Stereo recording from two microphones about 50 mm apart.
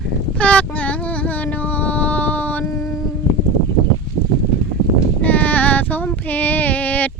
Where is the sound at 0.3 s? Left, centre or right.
Left.